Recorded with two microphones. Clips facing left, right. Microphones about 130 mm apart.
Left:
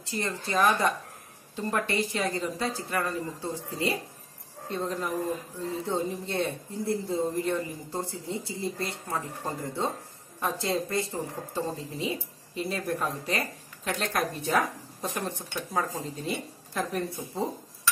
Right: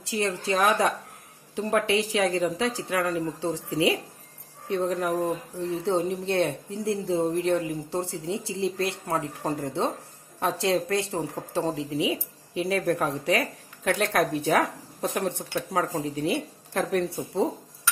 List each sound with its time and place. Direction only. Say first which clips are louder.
0.0 s speech: right 5 dB; 90° right
4.6 s speech: right 5 dB; 70° right (ahead or behind)
13.8 s speech: right 5 dB; 70° right (ahead or behind)